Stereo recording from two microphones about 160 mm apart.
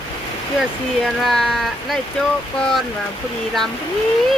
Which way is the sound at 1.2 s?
Centre (ahead or behind).